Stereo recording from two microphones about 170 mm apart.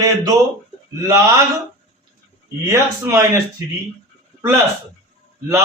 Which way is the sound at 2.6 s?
15° right (ahead or behind).